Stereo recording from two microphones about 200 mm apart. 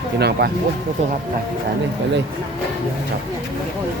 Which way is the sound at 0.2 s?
55° right (ahead or behind).